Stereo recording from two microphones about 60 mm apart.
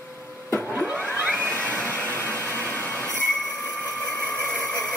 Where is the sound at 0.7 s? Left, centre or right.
Right.